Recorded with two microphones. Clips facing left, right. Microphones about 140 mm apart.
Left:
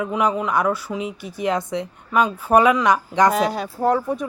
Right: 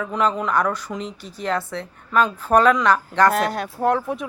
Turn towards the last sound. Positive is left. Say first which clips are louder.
# left 1 dB
turn(degrees=0)  # may be behind; listen again after turning